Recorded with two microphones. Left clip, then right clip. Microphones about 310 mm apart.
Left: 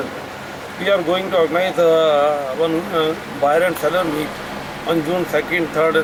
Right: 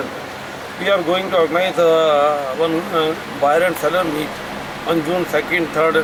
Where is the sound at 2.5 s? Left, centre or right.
Right.